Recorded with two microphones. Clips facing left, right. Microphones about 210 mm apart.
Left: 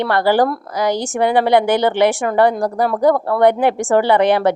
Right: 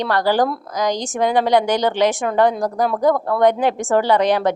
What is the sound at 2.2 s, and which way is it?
A woman's voice, centre (ahead or behind).